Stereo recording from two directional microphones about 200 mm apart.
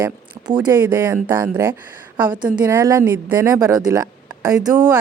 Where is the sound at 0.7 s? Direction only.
10° right (ahead or behind).